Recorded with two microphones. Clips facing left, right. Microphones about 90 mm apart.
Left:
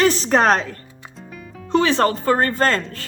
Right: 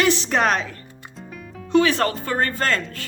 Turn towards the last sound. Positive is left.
turn(degrees=35)  # may be behind; listen again after turning